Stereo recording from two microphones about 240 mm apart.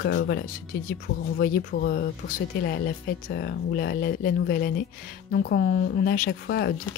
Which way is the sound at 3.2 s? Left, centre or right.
Left.